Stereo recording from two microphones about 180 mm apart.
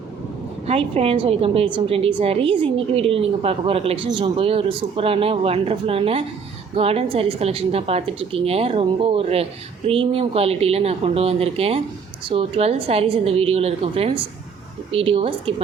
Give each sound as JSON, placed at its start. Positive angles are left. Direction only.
{"t": 0.7, "sound": "speech", "side_deg": -35}